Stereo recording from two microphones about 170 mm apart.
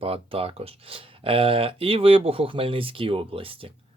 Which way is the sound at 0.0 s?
35° right (ahead or behind).